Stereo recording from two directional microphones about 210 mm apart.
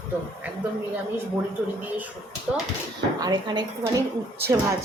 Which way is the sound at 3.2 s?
20° right (ahead or behind).